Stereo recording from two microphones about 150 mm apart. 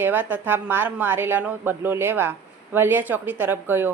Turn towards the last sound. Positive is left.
turn(degrees=-15)  # may be behind; listen again after turning